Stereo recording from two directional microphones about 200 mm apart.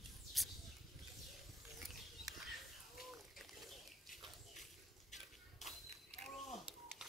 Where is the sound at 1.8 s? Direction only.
Centre (ahead or behind).